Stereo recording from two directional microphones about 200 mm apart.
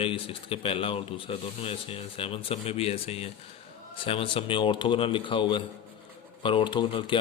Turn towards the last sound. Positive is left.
turn(degrees=25)  # may be behind; listen again after turning